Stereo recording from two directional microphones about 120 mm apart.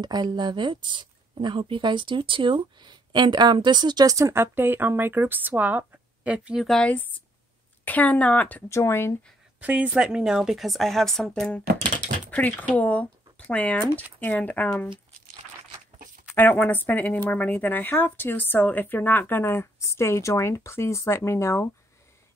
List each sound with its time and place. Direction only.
0.0 s speech: 35° right (ahead or behind); by 6.6 s 10° right (ahead or behind)
6.6 s speech: 5° left (ahead or behind); by 9.1 s 20° left (ahead or behind)
9.6 s speech: 10° right (ahead or behind); by 14.9 s 15° left (ahead or behind)
16.3 s speech: 15° left (ahead or behind)